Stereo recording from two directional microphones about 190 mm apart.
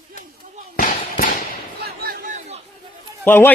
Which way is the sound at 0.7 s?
45° left (ahead or behind).